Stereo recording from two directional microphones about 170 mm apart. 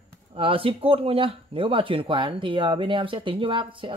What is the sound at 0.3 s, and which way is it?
Speech, 30° right (ahead or behind).